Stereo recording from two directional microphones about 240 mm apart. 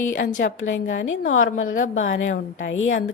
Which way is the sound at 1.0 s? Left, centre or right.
Left.